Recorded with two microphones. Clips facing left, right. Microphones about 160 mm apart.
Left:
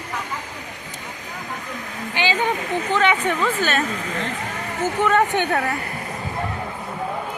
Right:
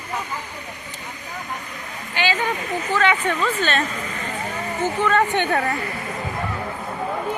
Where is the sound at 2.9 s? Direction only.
15° left (ahead or behind).